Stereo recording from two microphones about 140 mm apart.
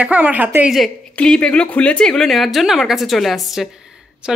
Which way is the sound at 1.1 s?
5° left (ahead or behind).